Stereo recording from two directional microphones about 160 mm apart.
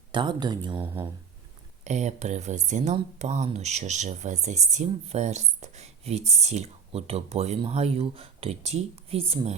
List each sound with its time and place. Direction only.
0.1 s speech: 30° right (ahead or behind)
1.8 s speech: 45° right (ahead or behind)